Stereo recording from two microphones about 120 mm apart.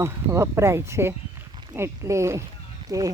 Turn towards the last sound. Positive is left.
turn(degrees=-30)  # may be behind; listen again after turning